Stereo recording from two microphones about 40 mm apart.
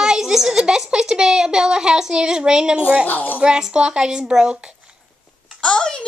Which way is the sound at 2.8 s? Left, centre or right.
Right.